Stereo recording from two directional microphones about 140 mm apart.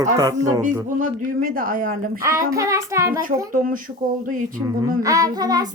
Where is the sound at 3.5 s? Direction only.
80° right.